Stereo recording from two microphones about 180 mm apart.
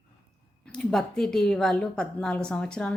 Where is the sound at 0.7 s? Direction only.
5° left (ahead or behind).